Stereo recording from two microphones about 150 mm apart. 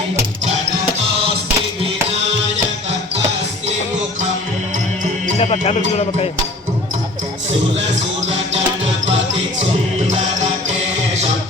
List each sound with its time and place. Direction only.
5.4 s speech: 45° left (ahead or behind)